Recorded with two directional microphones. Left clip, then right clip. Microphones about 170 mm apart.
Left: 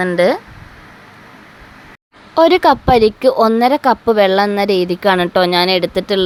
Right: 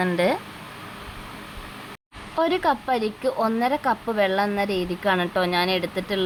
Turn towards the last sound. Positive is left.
turn(degrees=45)  # may be behind; listen again after turning